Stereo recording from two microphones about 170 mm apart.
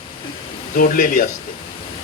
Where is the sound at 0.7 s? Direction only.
55° left (ahead or behind).